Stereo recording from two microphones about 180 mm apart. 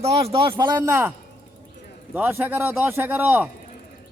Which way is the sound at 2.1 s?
10° right (ahead or behind).